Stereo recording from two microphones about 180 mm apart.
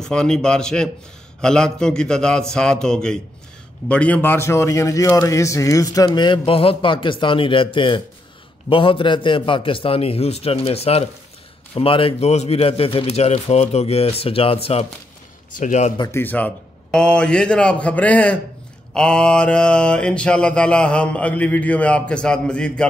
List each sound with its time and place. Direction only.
0.0 s mantra: 5° left (ahead or behind)
3.9 s a man's voice: 10° left (ahead or behind); by 15.9 s 40° left (ahead or behind)
16.0 s a man's voice: 15° left (ahead or behind)
18.9 s mantra: 5° left (ahead or behind)